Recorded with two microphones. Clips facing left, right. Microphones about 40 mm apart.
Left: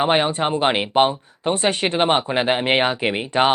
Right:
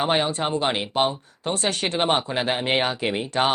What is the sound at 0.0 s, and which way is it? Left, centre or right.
Speech, left.